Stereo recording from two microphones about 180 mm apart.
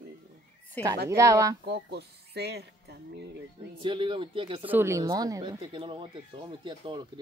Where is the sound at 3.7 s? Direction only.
30° right (ahead or behind).